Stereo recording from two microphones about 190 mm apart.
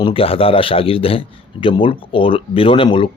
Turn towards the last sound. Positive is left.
turn(degrees=25)  # may be behind; listen again after turning